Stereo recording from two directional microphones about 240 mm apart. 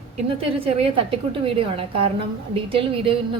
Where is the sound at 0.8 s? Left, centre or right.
Right.